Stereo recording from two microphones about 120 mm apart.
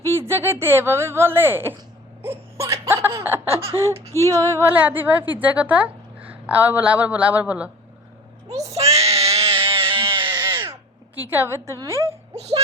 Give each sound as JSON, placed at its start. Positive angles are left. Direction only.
{"t": 0.0, "sound": "speech", "side_deg": -20}
{"t": 2.2, "sound": "a sound", "side_deg": -20}
{"t": 3.8, "sound": "child singing", "side_deg": -25}
{"t": 4.9, "sound": "a woman's voice", "side_deg": -15}
{"t": 8.4, "sound": "child singing", "side_deg": -30}
{"t": 8.7, "sound": "a sound", "side_deg": -60}
{"t": 9.3, "sound": "music", "side_deg": -55}
{"t": 10.2, "sound": "cat", "side_deg": -40}
{"t": 10.7, "sound": "speech", "side_deg": -15}
{"t": 12.3, "sound": "speech", "side_deg": -60}